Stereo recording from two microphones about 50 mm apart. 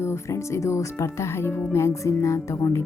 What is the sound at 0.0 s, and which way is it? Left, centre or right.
Speech, left.